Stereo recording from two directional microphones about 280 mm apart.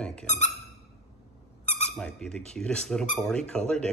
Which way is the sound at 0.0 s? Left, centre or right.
Centre.